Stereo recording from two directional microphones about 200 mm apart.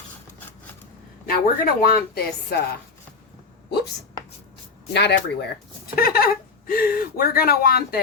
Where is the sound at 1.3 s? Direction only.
45° left (ahead or behind).